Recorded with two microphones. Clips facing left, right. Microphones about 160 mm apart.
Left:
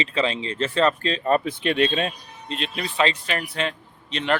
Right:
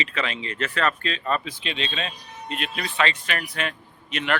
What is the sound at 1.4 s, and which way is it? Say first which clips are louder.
Speech: left 10 dB; 55° left (ahead or behind).